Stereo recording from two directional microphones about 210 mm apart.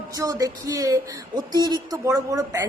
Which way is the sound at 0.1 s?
15° right (ahead or behind).